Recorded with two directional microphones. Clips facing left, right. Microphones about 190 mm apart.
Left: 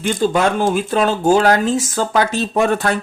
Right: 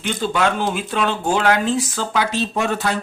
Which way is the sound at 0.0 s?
45° left (ahead or behind).